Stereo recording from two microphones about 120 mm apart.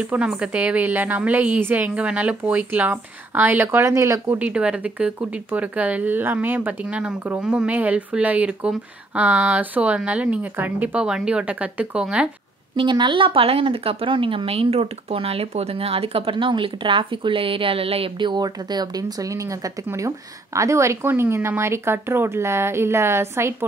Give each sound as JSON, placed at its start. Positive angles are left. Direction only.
{"t": 0.0, "sound": "speech", "side_deg": -10}
{"t": 4.4, "sound": "speech", "side_deg": -10}
{"t": 12.7, "sound": "a woman's voice", "side_deg": -40}